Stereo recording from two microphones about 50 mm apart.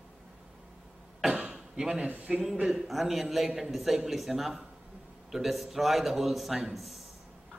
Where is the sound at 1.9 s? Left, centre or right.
Right.